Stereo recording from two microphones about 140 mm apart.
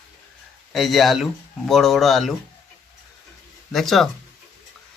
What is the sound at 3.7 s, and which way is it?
Speech, centre (ahead or behind).